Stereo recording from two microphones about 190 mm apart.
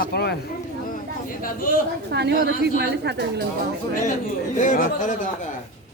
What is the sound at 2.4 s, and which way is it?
A man's voice, 60° right (ahead or behind).